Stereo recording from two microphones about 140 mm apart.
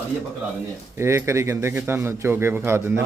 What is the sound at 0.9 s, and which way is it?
A man's voice, 20° right (ahead or behind).